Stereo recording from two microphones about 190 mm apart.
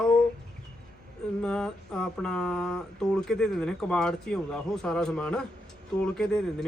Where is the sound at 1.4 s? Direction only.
5° left (ahead or behind).